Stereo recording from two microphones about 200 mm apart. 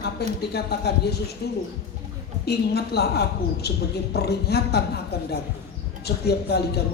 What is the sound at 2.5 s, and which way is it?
A woman's voice, 55° left (ahead or behind).